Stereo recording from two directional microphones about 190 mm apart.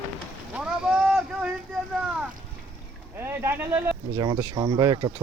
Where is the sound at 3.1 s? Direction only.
10° right (ahead or behind).